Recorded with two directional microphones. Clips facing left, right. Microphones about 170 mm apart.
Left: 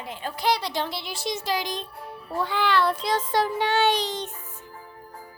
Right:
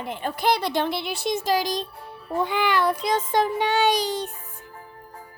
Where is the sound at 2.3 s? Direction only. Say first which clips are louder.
Right 2 dB; 20° right (ahead or behind).